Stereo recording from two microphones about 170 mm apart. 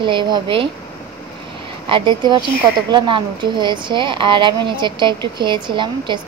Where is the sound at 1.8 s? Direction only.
30° right (ahead or behind).